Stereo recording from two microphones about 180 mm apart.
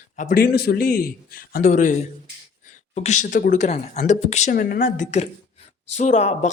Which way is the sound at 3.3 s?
55° left (ahead or behind).